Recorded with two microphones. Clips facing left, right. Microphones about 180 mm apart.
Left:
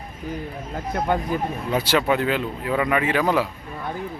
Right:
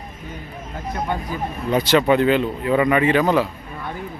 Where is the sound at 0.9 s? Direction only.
55° left (ahead or behind).